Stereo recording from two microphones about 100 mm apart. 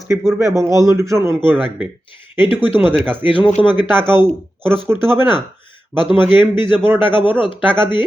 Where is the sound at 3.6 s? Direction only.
50° left (ahead or behind).